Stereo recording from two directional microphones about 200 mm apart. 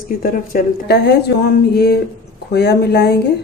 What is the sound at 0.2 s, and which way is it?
A woman's voice, 45° left (ahead or behind).